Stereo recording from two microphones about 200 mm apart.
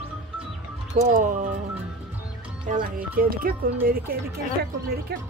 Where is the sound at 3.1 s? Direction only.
45° right (ahead or behind).